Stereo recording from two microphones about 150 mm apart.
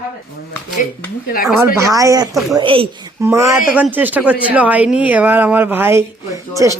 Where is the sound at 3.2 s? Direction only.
20° right (ahead or behind).